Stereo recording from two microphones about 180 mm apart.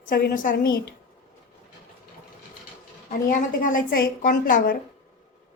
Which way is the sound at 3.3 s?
45° left (ahead or behind).